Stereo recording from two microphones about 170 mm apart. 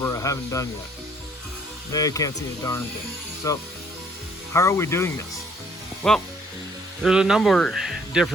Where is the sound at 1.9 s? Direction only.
20° left (ahead or behind).